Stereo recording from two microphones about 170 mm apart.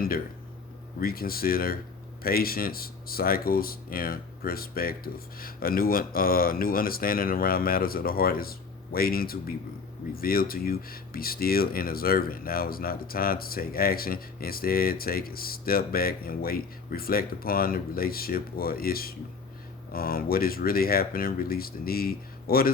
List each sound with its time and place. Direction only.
0.9 s speech: 60° left (ahead or behind)